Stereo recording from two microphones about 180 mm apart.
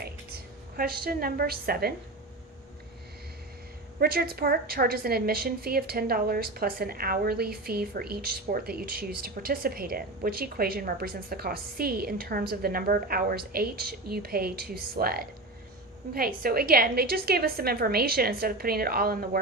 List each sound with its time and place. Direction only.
0.8 s a woman's voice: 60° right (ahead or behind)
4.0 s a woman's voice: 60° right (ahead or behind)